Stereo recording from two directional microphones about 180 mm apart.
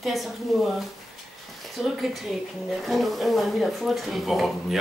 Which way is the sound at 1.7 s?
Centre (ahead or behind).